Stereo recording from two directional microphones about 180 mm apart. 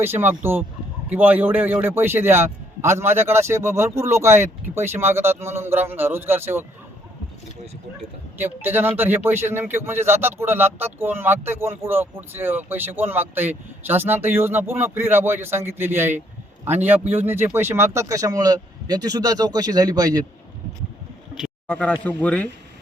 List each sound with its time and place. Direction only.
0.0 s a man's voice: 10° right (ahead or behind)
8.4 s a man's voice: 10° right (ahead or behind)
21.3 s a sound: 5° left (ahead or behind)
22.0 s speech: 10° left (ahead or behind)